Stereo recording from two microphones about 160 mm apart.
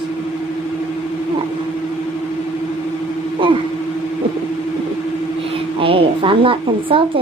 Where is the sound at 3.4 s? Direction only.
30° right (ahead or behind).